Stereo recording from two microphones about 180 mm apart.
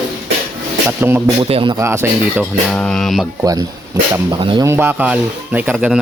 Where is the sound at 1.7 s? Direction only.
15° right (ahead or behind).